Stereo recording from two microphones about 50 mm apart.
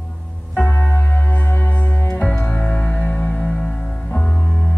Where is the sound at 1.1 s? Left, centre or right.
Left.